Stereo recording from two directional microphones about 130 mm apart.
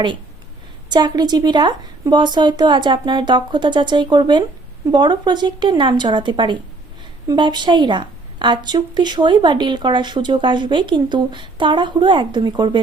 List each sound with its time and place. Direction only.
0.9 s a woman's voice: 35° right (ahead or behind)